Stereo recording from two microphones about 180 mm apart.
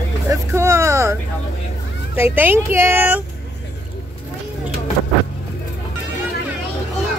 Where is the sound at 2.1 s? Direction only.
10° right (ahead or behind).